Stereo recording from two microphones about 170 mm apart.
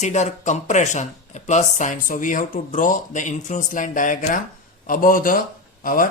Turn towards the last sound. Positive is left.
turn(degrees=55)  # may be behind; listen again after turning